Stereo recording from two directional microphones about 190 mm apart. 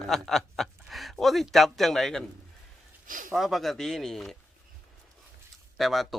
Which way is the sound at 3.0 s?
45° right (ahead or behind).